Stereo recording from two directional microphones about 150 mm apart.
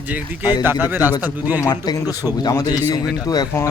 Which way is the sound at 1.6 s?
25° left (ahead or behind).